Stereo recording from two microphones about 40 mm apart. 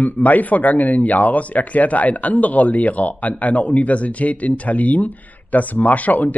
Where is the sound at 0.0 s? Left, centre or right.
Left.